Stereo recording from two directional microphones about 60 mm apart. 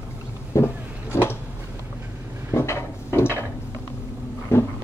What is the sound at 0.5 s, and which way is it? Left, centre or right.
Vehicle, left.